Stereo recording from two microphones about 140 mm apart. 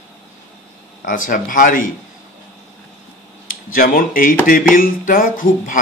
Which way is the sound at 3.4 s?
85° left.